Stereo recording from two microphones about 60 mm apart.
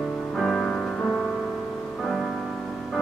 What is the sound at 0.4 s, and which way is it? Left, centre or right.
Music, centre.